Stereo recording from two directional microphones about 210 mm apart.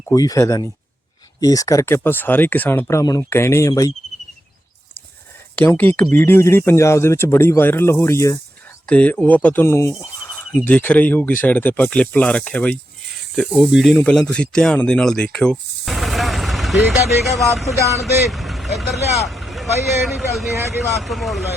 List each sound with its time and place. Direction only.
0.1 s speech: 15° left (ahead or behind)
5.5 s speech: 10° left (ahead or behind)
18.3 s vehicle: centre (ahead or behind)
20.0 s speech: centre (ahead or behind)